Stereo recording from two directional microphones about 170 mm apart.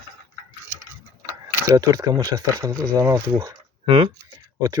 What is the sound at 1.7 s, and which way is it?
Speech, 20° right (ahead or behind).